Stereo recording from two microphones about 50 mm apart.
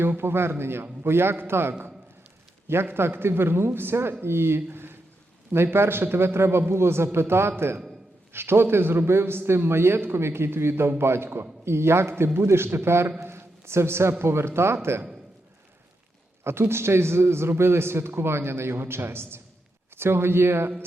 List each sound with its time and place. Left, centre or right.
0.0 s a man's voice: right
16.4 s a man's voice: right